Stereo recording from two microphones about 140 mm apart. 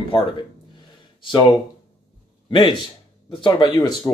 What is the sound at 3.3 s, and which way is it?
Speech, 35° left (ahead or behind).